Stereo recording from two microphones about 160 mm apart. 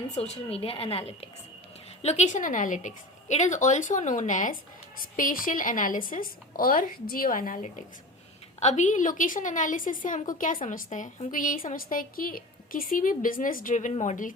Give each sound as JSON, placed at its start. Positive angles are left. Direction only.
{"t": 0.1, "sound": "a woman's voice", "side_deg": 40}